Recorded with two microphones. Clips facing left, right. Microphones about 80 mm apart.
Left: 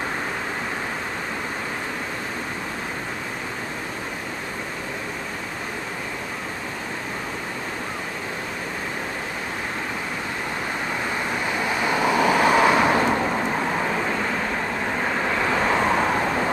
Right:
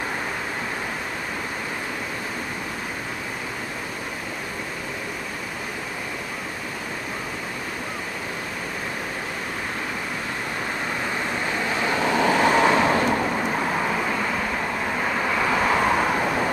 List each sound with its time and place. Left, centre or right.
11.8 s vehicle: centre
13.6 s vehicle: centre
15.5 s vehicle: centre